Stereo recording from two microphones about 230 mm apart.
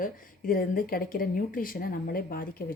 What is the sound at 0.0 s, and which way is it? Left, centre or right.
Speech, left.